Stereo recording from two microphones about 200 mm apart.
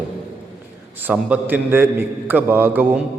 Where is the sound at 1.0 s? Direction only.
10° right (ahead or behind).